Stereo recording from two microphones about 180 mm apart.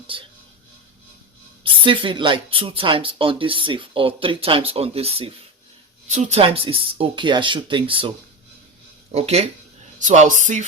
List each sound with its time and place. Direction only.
1.6 s speech: 30° right (ahead or behind)
9.1 s speech: 35° right (ahead or behind)